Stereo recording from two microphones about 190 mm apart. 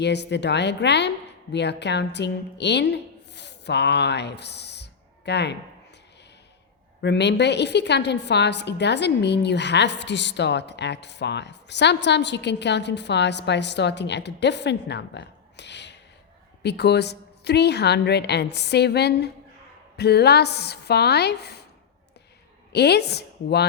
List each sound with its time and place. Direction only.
0.0 s a woman's voice: 65° left (ahead or behind)
7.0 s a woman's voice: 65° left (ahead or behind)
22.7 s a woman's voice: 60° left (ahead or behind)